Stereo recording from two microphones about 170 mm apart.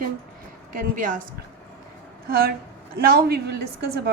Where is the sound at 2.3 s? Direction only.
60° right (ahead or behind).